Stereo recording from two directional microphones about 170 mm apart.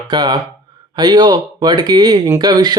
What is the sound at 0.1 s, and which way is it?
Speech, 25° right (ahead or behind).